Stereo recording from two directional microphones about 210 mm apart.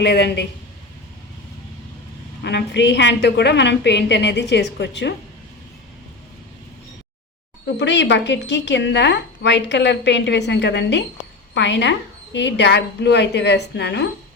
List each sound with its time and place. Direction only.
0.0 s speech: 55° left (ahead or behind)
2.4 s a woman's voice: 55° left (ahead or behind)
7.8 s a woman's voice: 55° left (ahead or behind)